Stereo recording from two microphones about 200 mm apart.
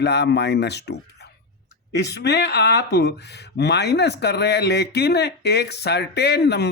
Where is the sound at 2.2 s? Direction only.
55° left (ahead or behind).